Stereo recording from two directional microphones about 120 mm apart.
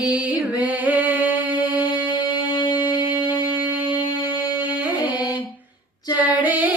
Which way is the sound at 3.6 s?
15° right (ahead or behind).